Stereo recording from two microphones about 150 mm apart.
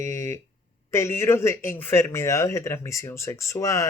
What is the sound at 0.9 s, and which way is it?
Speech, 20° left (ahead or behind).